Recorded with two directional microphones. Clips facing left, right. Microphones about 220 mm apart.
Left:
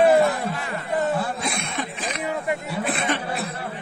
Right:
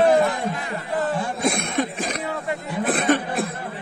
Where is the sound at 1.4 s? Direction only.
50° right (ahead or behind).